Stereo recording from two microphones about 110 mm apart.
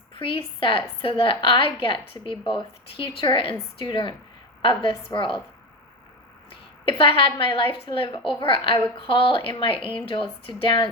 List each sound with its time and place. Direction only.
0.2 s a woman's voice: 55° left (ahead or behind)
7.0 s a woman's voice: 55° left (ahead or behind)